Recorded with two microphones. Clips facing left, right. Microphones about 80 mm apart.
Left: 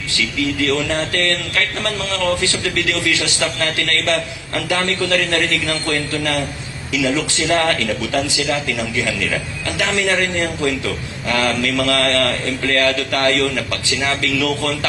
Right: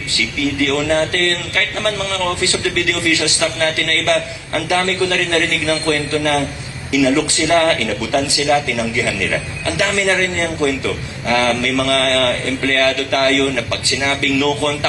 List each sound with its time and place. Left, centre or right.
0.2 s a man's voice: centre